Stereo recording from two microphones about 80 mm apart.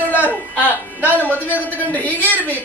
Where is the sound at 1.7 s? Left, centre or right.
Left.